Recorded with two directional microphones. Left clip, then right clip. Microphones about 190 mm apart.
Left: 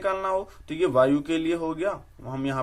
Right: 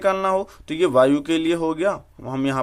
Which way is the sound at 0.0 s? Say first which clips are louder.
Right 6 dB; 40° right (ahead or behind).